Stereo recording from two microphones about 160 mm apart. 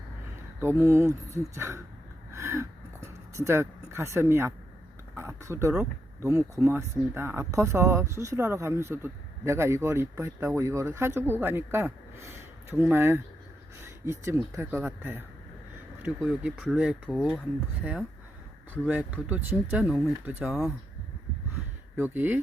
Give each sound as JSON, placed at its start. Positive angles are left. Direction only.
{"t": 0.6, "sound": "speech", "side_deg": -15}
{"t": 2.3, "sound": "a sound", "side_deg": -15}
{"t": 5.1, "sound": "speech", "side_deg": -15}
{"t": 18.7, "sound": "speech", "side_deg": -10}
{"t": 21.9, "sound": "speech", "side_deg": -10}